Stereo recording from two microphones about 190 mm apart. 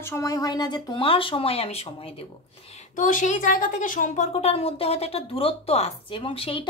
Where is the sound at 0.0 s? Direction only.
15° left (ahead or behind); by 2.1 s 30° left (ahead or behind).